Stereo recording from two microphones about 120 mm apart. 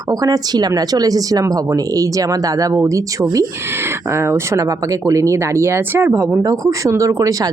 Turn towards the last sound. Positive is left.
turn(degrees=-30)  # may be behind; listen again after turning